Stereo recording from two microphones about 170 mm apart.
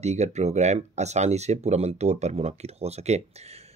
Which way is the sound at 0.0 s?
40° right (ahead or behind).